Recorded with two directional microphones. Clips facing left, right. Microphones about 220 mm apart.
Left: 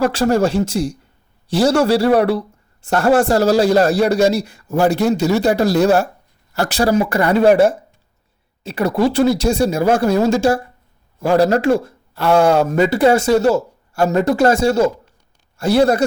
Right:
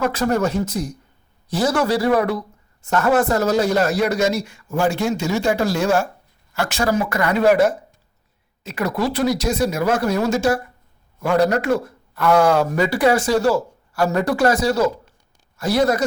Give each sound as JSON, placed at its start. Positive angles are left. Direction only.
{"t": 0.2, "sound": "a man's voice", "side_deg": 30}